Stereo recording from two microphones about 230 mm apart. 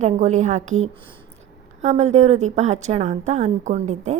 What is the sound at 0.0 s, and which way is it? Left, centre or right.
A woman's voice, right.